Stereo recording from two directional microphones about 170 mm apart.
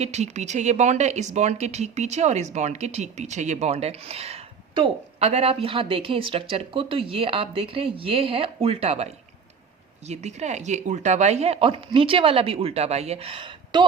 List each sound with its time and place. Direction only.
0.0 s speech: 40° right (ahead or behind)